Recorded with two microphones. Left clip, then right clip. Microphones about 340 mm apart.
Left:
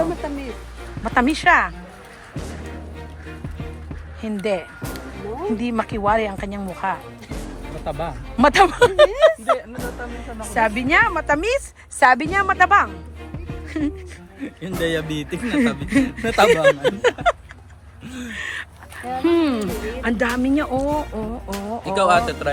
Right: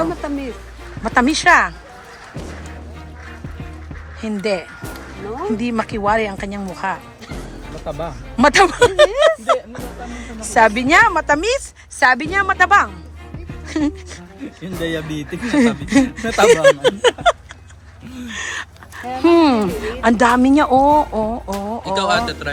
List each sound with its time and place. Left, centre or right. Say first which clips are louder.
0.2 s speech: right 4 dB; right
1.0 s speech: right 3 dB; centre
4.2 s speech: right 2 dB; centre
18.1 s a sound: right 3 dB; centre
19.2 s speech: right 7 dB; centre
21.9 s a man's voice: left 1 dB; centre